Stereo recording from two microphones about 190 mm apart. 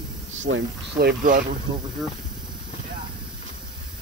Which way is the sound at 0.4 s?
70° right (ahead or behind).